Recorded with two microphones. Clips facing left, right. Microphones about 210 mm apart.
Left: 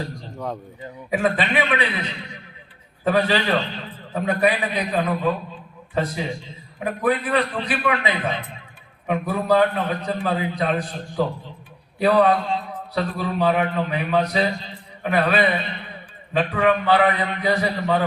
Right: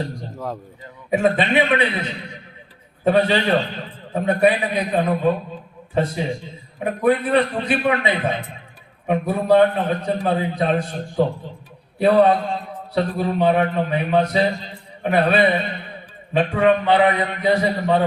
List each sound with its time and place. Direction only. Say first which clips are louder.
0.3 s a man's voice: left 1 dB; centre (ahead or behind)
1.1 s a man's voice: right 4 dB; 25° right (ahead or behind)